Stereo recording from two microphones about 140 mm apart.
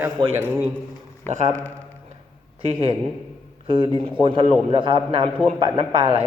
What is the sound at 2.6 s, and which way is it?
A man's voice, 40° right (ahead or behind).